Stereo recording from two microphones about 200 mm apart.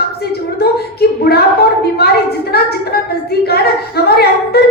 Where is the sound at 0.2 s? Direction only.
55° left (ahead or behind).